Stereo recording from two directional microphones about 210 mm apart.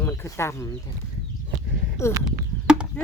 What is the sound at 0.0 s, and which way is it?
Speech, 15° left (ahead or behind).